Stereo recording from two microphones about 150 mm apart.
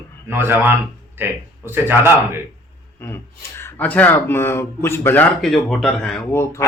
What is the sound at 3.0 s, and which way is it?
Speech, 15° left (ahead or behind).